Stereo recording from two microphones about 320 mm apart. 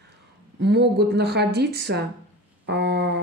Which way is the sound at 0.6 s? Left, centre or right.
Right.